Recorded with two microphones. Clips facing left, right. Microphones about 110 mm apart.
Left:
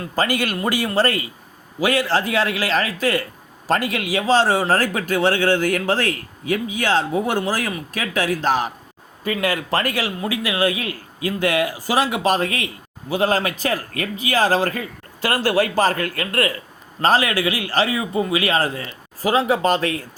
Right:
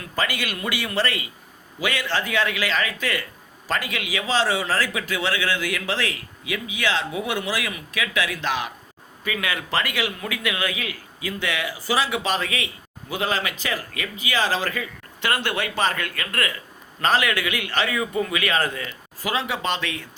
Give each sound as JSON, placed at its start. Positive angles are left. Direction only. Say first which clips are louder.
{"t": 0.0, "sound": "a man's voice", "louder": "left 6 dB", "side_deg": 40}
{"t": 10.2, "sound": "a man's voice", "louder": "left 6 dB", "side_deg": 30}